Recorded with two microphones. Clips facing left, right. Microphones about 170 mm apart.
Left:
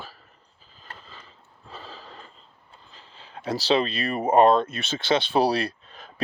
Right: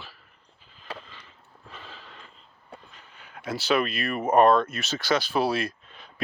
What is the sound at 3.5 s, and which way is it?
Speech, 35° left (ahead or behind).